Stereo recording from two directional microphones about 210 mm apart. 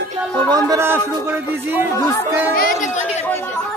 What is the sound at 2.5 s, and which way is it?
Speech, 40° left (ahead or behind).